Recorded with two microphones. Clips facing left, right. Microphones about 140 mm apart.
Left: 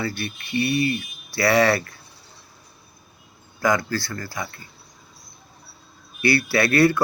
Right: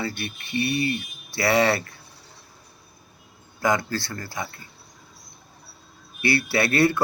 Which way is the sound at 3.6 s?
25° right (ahead or behind).